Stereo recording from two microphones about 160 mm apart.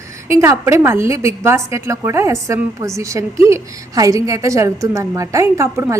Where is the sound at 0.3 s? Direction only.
15° right (ahead or behind).